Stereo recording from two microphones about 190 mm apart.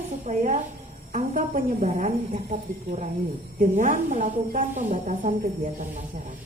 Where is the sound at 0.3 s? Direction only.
40° right (ahead or behind).